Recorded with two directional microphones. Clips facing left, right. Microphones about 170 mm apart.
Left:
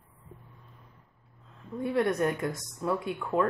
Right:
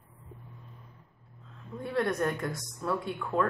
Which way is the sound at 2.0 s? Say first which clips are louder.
Left 2 dB; 20° left (ahead or behind).